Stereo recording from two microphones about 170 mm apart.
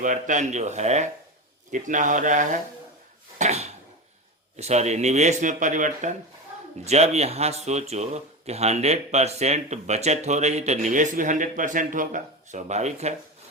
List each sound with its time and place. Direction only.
0.0 s a man's voice: 50° right (ahead or behind)
3.3 s a sound: 40° right (ahead or behind)
4.5 s a man's voice: 40° right (ahead or behind)